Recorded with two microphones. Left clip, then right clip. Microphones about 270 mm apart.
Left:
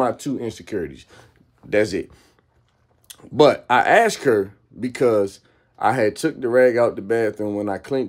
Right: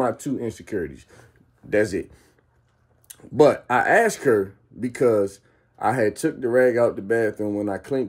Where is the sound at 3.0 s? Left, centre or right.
Centre.